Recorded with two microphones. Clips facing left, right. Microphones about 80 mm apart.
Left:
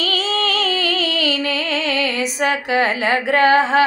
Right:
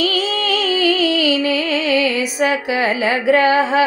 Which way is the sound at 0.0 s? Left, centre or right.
Left.